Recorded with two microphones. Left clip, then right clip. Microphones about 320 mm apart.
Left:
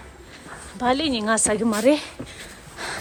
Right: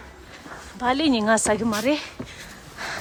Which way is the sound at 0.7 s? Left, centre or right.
Centre.